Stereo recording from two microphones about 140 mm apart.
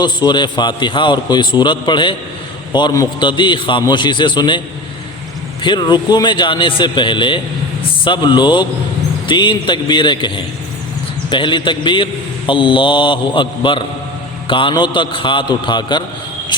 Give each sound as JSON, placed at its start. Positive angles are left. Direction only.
{"t": 0.0, "sound": "a man's voice", "side_deg": 30}
{"t": 5.6, "sound": "a man's voice", "side_deg": 35}